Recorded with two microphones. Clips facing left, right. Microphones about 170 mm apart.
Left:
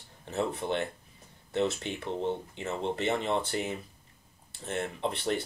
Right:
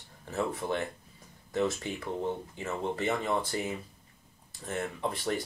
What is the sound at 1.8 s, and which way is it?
Speech, 25° left (ahead or behind).